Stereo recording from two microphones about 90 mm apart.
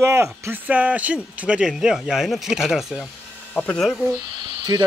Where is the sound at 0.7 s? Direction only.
15° right (ahead or behind); by 4.0 s 5° left (ahead or behind).